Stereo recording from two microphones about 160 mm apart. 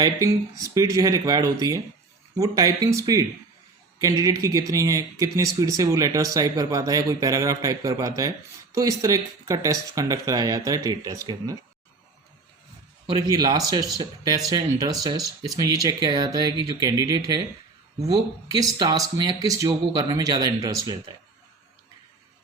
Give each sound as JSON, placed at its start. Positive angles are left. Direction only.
{"t": 0.0, "sound": "speech", "side_deg": -20}
{"t": 13.1, "sound": "speech", "side_deg": -20}